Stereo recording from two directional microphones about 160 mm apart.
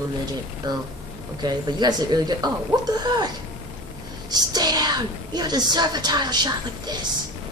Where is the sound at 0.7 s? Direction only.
25° right (ahead or behind).